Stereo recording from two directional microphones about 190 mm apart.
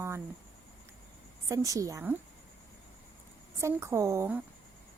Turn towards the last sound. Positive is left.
turn(degrees=-15)  # may be behind; listen again after turning